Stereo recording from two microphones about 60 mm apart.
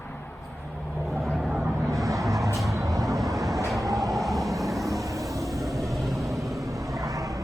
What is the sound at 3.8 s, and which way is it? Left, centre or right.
Train, right.